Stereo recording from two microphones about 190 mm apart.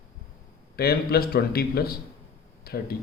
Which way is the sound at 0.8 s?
55° left (ahead or behind).